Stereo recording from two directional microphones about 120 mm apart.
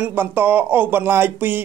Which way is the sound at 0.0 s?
20° right (ahead or behind).